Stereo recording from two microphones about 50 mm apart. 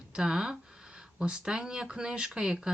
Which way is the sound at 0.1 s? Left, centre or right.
Centre.